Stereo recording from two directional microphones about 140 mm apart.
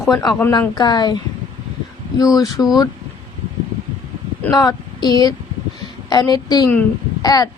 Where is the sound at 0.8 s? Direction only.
30° left (ahead or behind).